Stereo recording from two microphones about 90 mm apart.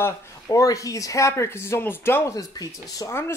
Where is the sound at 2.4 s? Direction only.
45° left (ahead or behind).